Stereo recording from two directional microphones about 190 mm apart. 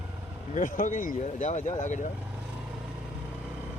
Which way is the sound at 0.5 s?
40° left (ahead or behind).